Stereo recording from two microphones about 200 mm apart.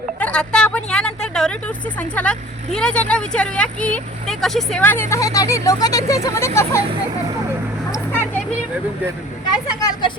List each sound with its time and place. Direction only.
0.2 s speech: 5° left (ahead or behind)
9.6 s speech: 20° left (ahead or behind)